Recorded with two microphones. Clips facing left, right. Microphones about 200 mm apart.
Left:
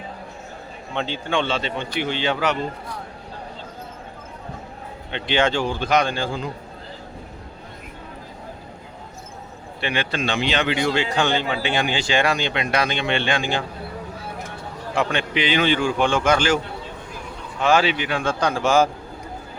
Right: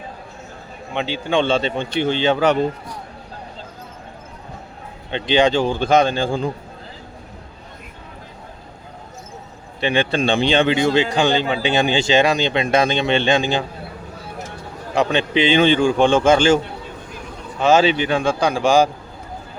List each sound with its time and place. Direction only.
1.3 s a man's voice: 25° right (ahead or behind)
5.1 s a man's voice: 20° right (ahead or behind)
9.8 s a man's voice: 25° right (ahead or behind)
14.9 s a man's voice: 25° right (ahead or behind)
17.6 s speech: 20° right (ahead or behind)